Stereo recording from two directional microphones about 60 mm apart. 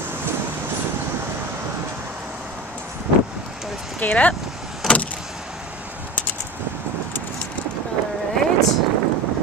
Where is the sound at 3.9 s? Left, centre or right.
Left.